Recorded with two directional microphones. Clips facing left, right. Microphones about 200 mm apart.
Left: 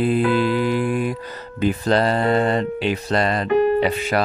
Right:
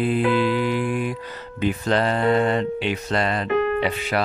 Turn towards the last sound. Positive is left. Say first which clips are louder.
# left 4 dB
turn(degrees=40)  # may be behind; listen again after turning